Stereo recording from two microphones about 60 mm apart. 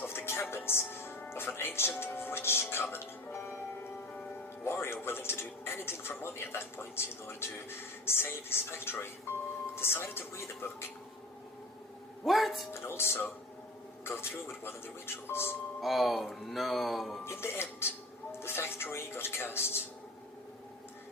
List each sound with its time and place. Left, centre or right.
0.1 s music: left
1.3 s speech: left
4.6 s speech: left
12.2 s speech: centre
12.7 s speech: left
15.8 s speech: centre
17.2 s speech: left